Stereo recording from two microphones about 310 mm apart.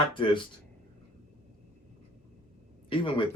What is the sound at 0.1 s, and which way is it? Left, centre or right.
Speech, centre.